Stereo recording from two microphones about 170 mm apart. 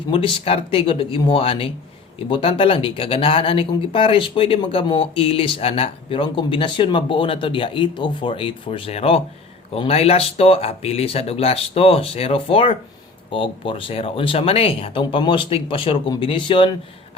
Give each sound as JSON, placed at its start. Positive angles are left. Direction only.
{"t": 0.1, "sound": "speech", "side_deg": 35}